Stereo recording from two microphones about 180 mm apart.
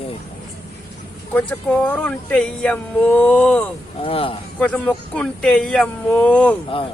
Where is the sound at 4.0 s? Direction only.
30° left (ahead or behind).